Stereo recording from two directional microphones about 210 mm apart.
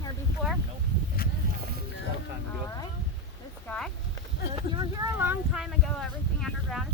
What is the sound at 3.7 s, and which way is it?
Speech, 5° left (ahead or behind).